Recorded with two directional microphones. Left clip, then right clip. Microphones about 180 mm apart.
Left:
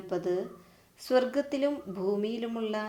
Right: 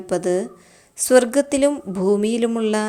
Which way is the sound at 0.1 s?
40° right (ahead or behind).